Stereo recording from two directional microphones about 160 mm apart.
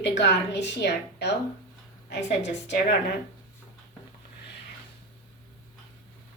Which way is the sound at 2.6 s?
90° left.